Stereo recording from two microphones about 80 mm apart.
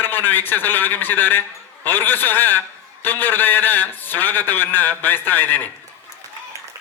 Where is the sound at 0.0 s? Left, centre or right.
Left.